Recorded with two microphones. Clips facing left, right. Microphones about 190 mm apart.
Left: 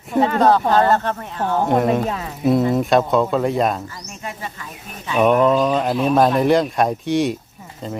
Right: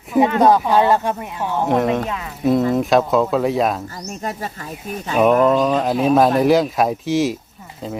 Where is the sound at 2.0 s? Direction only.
35° left (ahead or behind).